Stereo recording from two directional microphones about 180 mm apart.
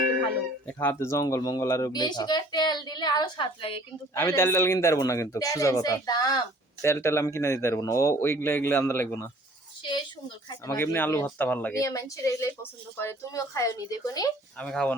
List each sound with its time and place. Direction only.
0.7 s speech: 10° left (ahead or behind); by 3.8 s 25° left (ahead or behind)
4.1 s speech: 15° left (ahead or behind)
10.7 s speech: 10° left (ahead or behind)
14.6 s speech: 5° left (ahead or behind)